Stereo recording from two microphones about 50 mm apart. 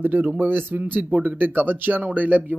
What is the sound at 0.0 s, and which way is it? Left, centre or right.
Speech, right.